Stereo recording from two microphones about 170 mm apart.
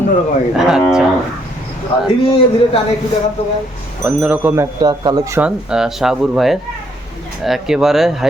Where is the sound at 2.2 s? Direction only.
30° left (ahead or behind).